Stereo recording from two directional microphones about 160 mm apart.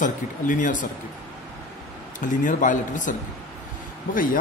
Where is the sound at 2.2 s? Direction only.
55° left (ahead or behind).